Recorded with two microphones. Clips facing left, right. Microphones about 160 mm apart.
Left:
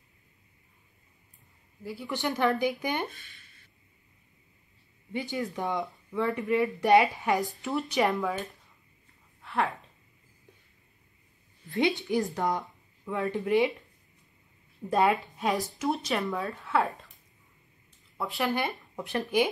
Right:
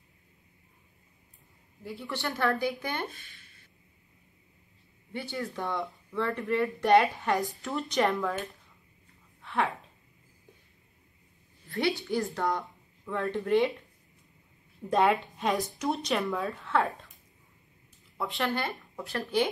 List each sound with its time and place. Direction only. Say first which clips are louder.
1.8 s speech: left 2 dB; centre (ahead or behind)
2.0 s speech: left 2 dB; 20° left (ahead or behind)
5.1 s speech: left 3 dB; 15° left (ahead or behind); by 8.5 s centre (ahead or behind)
9.4 s a sound: even; centre (ahead or behind)
11.7 s speech: left 2 dB; 20° left (ahead or behind)
14.9 s speech: even; centre (ahead or behind)
18.1 s speech: left 1 dB; centre (ahead or behind)
18.5 s speech: left 2 dB; 15° left (ahead or behind)